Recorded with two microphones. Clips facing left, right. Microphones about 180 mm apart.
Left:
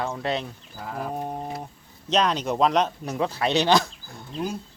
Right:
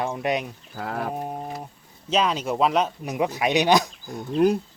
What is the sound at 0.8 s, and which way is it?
Speech, 75° right (ahead or behind).